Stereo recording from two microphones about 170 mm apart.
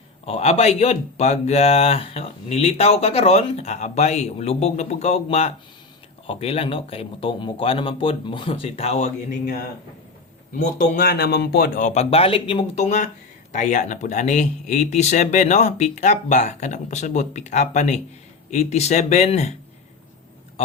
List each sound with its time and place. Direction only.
0.3 s speech: 35° left (ahead or behind)